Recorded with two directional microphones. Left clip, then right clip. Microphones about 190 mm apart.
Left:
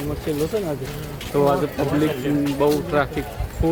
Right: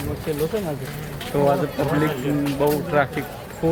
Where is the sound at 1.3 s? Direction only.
10° left (ahead or behind).